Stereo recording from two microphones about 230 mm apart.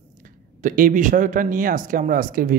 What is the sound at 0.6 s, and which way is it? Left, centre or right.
Speech, right.